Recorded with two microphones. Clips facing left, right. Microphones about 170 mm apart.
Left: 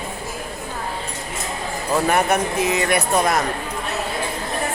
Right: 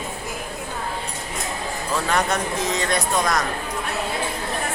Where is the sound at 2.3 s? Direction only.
65° left (ahead or behind).